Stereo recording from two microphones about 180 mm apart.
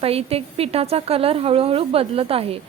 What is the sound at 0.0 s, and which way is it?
A woman's voice, 35° right (ahead or behind).